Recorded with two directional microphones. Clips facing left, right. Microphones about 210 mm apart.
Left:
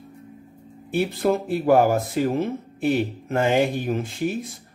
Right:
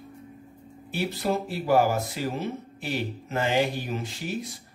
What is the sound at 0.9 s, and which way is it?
Speech, 50° left (ahead or behind).